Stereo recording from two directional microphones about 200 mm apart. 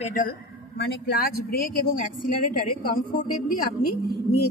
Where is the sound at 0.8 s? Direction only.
55° left (ahead or behind).